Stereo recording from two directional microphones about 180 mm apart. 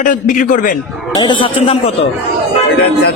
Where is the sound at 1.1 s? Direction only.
25° left (ahead or behind).